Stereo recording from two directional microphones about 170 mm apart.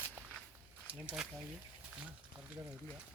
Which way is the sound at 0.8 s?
10° right (ahead or behind).